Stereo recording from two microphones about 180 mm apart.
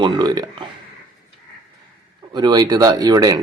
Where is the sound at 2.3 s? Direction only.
25° right (ahead or behind).